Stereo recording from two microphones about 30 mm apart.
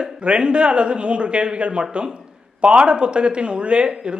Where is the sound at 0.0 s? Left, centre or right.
Right.